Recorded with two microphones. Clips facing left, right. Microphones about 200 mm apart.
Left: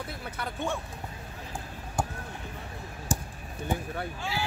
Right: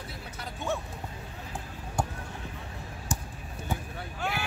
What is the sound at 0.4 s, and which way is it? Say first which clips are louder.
Speech: left 6 dB; 60° left (ahead or behind).